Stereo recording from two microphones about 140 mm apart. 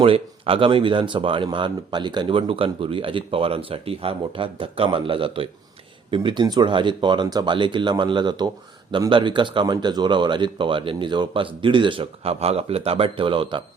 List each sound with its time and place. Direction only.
0.0 s speech: 40° right (ahead or behind)